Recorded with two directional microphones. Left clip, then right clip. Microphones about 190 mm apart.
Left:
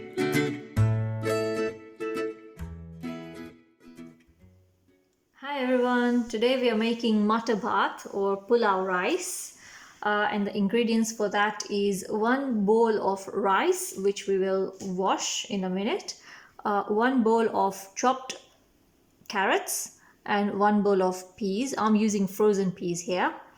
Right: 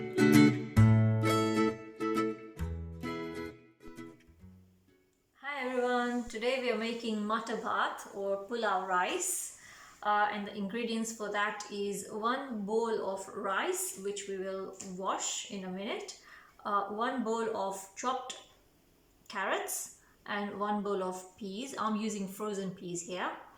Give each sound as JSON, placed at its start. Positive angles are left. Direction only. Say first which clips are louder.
{"t": 0.3, "sound": "music", "louder": "right 5 dB", "side_deg": 0}
{"t": 5.4, "sound": "a woman's voice", "louder": "left 7 dB", "side_deg": 55}